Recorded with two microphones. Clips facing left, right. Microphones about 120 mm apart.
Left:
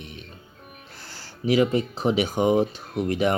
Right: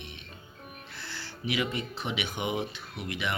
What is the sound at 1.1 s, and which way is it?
Speech, 40° left (ahead or behind).